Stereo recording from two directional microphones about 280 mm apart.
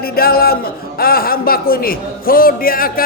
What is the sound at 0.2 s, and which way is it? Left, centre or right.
A man's voice, left.